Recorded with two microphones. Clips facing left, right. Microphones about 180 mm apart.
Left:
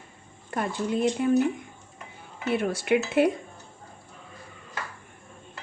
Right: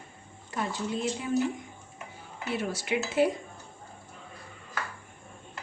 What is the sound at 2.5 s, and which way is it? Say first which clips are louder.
Speech: left 7 dB; 55° left (ahead or behind).